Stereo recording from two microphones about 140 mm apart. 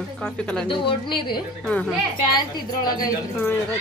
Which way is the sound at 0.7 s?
35° left (ahead or behind).